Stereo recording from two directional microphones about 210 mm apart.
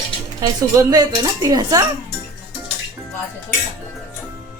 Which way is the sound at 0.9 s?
15° right (ahead or behind).